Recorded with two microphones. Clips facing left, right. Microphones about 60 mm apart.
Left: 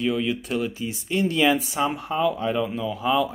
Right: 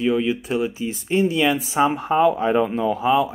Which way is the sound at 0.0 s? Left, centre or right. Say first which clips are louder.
Right 4 dB; centre.